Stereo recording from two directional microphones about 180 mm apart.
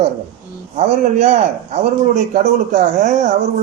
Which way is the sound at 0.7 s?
40° right (ahead or behind).